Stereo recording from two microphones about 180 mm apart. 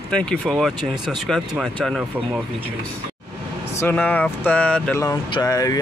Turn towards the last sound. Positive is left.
turn(degrees=20)  # may be behind; listen again after turning